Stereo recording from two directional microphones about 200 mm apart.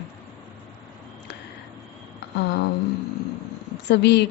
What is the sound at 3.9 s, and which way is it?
Speech, 60° left (ahead or behind).